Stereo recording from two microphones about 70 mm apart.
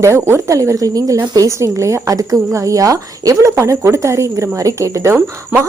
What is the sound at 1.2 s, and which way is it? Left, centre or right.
Speech, right.